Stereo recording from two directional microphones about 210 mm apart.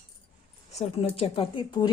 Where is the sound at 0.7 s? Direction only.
30° left (ahead or behind).